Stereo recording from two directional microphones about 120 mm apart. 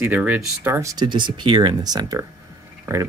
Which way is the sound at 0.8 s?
40° right (ahead or behind).